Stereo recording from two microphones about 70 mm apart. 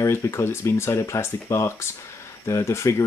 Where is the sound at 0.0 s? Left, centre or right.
Left.